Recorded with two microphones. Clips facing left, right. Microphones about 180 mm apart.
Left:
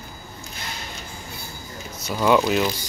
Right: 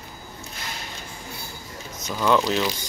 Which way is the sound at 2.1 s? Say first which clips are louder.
Left 3 dB; 10° left (ahead or behind).